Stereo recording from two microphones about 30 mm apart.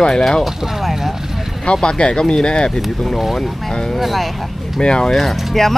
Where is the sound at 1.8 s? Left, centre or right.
Left.